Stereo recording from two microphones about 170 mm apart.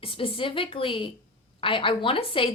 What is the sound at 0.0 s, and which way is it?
A woman's voice, 30° left (ahead or behind).